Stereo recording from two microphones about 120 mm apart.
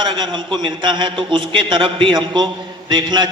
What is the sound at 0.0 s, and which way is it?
A man's voice, 40° right (ahead or behind).